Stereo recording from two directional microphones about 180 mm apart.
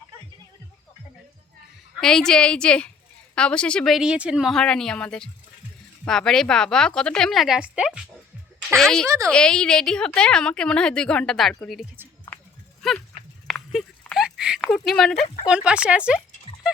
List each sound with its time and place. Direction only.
2.0 s a woman's voice: 5° left (ahead or behind)
9.0 s a woman's voice: 15° right (ahead or behind)
9.3 s a woman's voice: 5° left (ahead or behind)
13.5 s a sound: centre (ahead or behind)
15.4 s a woman's voice: 5° right (ahead or behind)